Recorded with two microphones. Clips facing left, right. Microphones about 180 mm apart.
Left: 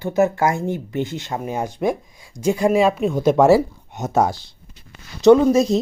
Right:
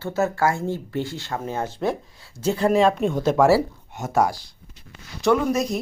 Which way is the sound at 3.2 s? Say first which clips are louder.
Left 4 dB; 20° left (ahead or behind).